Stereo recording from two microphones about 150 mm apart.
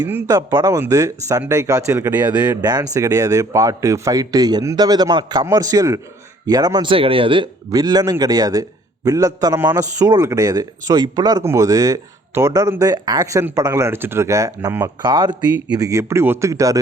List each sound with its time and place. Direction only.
0.0 s a man's voice: 15° right (ahead or behind)
2.6 s a man's voice: 25° right (ahead or behind)
6.9 s a man's voice: 35° right (ahead or behind); by 14.8 s 20° right (ahead or behind)
15.0 s a man's voice: 30° right (ahead or behind)